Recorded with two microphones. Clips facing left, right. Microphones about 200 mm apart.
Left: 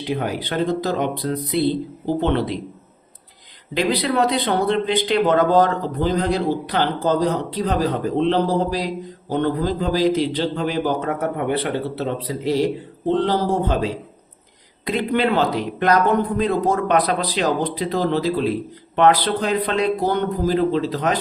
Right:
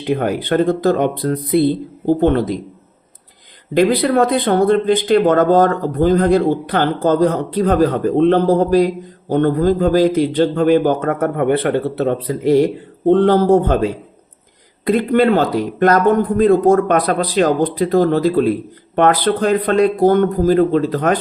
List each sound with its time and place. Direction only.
0.1 s speech: 55° right (ahead or behind)
3.8 s a man's voice: 50° right (ahead or behind)